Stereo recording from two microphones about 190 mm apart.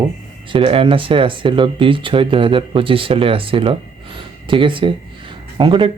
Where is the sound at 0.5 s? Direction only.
25° right (ahead or behind).